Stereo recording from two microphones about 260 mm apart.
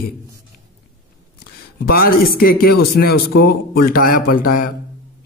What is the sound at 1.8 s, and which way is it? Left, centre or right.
Speech, left.